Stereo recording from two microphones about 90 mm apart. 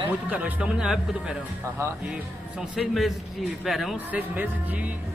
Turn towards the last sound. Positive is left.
turn(degrees=0)  # may be behind; listen again after turning